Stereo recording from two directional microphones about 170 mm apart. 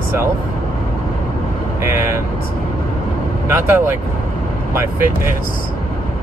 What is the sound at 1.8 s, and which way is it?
Speech, 15° right (ahead or behind).